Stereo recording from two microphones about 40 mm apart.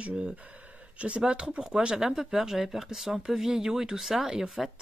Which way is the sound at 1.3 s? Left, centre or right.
Right.